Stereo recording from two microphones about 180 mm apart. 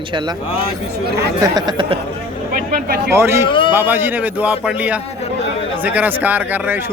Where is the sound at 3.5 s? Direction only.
25° left (ahead or behind).